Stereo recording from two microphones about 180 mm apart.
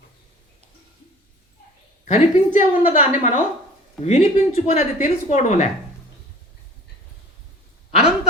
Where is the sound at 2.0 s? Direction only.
40° left (ahead or behind).